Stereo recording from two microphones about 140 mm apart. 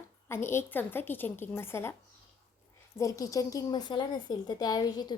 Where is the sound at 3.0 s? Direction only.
25° left (ahead or behind).